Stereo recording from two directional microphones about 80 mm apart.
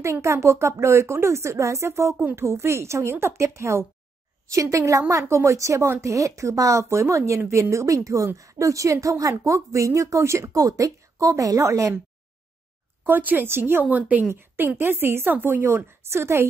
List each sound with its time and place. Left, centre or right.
0.0 s a woman's voice: right
13.0 s speech: right
14.3 s a woman's voice: right